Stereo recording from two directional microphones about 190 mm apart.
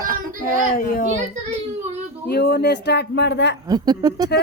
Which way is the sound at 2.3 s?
60° left (ahead or behind).